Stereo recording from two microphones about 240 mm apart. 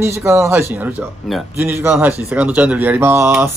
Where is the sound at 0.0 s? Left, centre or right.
Centre.